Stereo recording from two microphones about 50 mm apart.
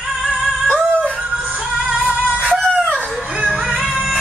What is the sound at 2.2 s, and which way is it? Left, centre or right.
Music, right.